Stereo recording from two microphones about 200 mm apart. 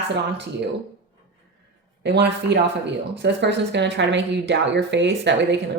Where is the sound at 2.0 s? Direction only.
55° right (ahead or behind).